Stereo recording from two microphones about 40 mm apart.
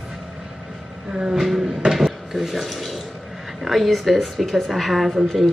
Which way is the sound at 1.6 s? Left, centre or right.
Centre.